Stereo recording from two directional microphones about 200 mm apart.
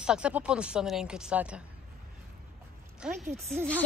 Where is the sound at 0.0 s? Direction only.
5° right (ahead or behind).